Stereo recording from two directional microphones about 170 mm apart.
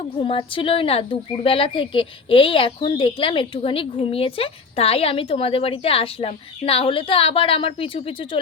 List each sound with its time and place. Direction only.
0.2 s speech: 30° left (ahead or behind)